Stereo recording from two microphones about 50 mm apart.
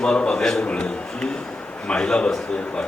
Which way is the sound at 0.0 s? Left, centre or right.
Centre.